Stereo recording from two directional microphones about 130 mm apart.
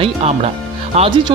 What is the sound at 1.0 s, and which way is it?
Speech, 45° right (ahead or behind).